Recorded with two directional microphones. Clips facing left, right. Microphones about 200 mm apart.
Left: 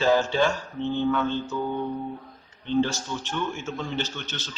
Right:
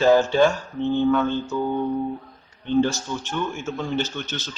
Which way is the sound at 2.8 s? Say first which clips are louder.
Right 3 dB; 45° right (ahead or behind).